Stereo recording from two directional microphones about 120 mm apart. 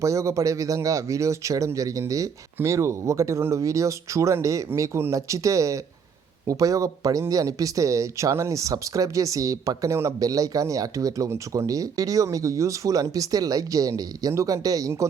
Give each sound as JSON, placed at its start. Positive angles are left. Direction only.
{"t": 0.0, "sound": "speech", "side_deg": -25}